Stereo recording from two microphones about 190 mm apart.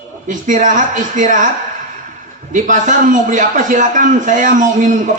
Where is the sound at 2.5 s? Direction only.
40° right (ahead or behind).